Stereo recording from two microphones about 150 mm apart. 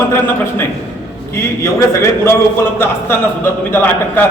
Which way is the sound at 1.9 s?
20° left (ahead or behind).